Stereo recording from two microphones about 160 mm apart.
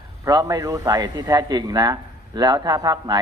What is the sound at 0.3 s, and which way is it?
A man's voice, 20° right (ahead or behind).